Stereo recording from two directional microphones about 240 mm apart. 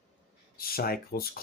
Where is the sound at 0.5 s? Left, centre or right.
Left.